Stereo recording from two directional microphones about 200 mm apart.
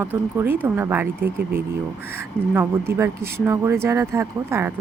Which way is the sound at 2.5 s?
10° right (ahead or behind).